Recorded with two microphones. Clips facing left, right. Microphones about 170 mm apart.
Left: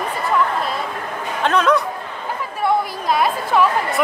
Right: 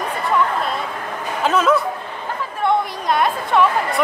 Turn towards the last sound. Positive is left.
turn(degrees=0)  # may be behind; listen again after turning